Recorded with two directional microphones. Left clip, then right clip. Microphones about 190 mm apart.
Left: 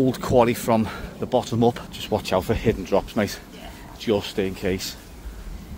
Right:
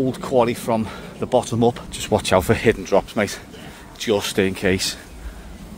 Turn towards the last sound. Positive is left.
turn(degrees=-25)  # may be behind; listen again after turning